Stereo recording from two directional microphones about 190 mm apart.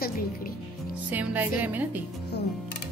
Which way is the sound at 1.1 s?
10° right (ahead or behind).